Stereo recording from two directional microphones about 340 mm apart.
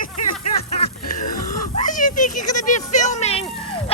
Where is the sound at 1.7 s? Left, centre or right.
Left.